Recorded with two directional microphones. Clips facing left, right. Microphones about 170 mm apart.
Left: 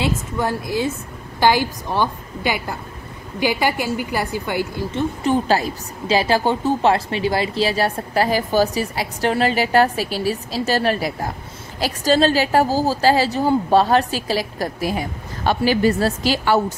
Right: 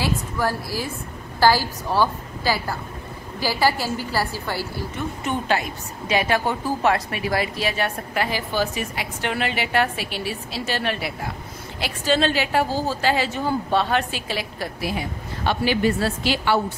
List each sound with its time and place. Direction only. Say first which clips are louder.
0.0 s a woman's voice: left 2 dB; 20° left (ahead or behind)
5.2 s a woman's voice: left 5 dB; 35° left (ahead or behind)